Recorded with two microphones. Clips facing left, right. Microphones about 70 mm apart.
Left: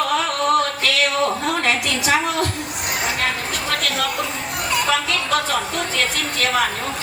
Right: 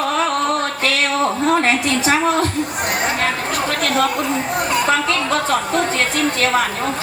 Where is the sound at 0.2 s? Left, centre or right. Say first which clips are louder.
Right 1 dB; right.